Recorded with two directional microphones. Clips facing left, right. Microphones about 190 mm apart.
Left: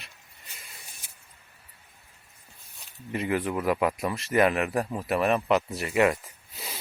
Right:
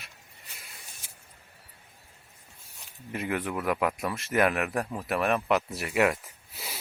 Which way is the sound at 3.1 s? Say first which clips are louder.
Left 3 dB; centre (ahead or behind).